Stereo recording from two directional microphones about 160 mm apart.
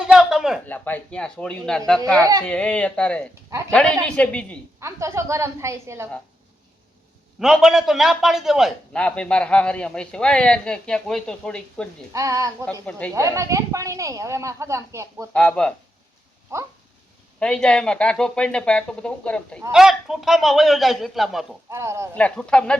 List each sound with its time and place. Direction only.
0.0 s speech: 5° right (ahead or behind)
0.7 s speech: 10° left (ahead or behind)
4.8 s a woman's voice: 20° right (ahead or behind)
7.3 s a man's voice: centre (ahead or behind)
12.1 s speech: 20° right (ahead or behind)
12.8 s speech: 5° left (ahead or behind)
13.1 s speech: 20° right (ahead or behind)
15.3 s a man's voice: 5° left (ahead or behind)
17.4 s a man's voice: 5° left (ahead or behind)
21.7 s a woman's voice: 15° right (ahead or behind)
22.1 s a man's voice: 5° left (ahead or behind)